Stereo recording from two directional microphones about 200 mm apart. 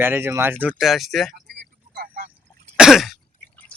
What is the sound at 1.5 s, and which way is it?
Vehicle, 50° right (ahead or behind).